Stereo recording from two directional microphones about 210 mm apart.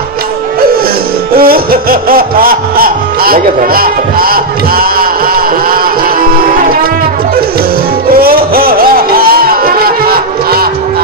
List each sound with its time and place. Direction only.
1.3 s music: 45° right (ahead or behind)
8.2 s music: 45° right (ahead or behind)